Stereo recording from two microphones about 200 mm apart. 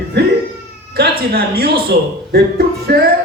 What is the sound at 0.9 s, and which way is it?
Speech, 50° right (ahead or behind).